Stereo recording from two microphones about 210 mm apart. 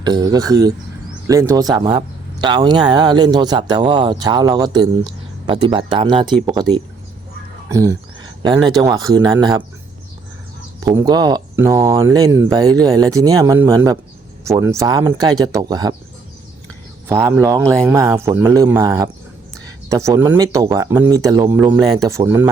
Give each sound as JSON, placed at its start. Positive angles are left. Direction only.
{"t": 0.0, "sound": "speech", "side_deg": -20}
{"t": 7.7, "sound": "a sound", "side_deg": -15}
{"t": 8.8, "sound": "speech", "side_deg": -15}
{"t": 10.8, "sound": "speech", "side_deg": -15}
{"t": 17.1, "sound": "speech", "side_deg": -10}
{"t": 17.6, "sound": "speech", "side_deg": 5}
{"t": 17.8, "sound": "speech", "side_deg": -10}